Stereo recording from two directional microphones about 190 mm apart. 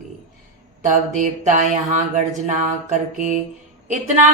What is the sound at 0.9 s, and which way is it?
Speech, 40° right (ahead or behind).